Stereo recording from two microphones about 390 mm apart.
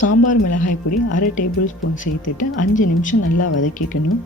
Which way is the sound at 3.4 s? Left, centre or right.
Left.